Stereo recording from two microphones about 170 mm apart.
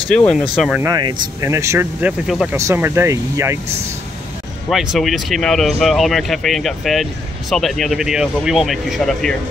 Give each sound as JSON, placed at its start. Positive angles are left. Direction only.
{"t": 0.1, "sound": "speech", "side_deg": 5}
{"t": 0.7, "sound": "speech", "side_deg": -20}
{"t": 2.5, "sound": "speech", "side_deg": -15}
{"t": 4.6, "sound": "speech", "side_deg": 0}